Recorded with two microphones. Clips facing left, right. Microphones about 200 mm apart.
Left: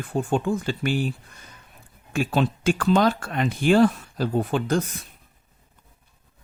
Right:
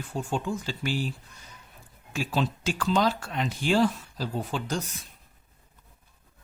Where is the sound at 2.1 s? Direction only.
55° left (ahead or behind).